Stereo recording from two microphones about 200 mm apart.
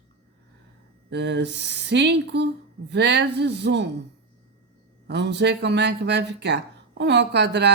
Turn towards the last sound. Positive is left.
turn(degrees=-60)  # may be behind; listen again after turning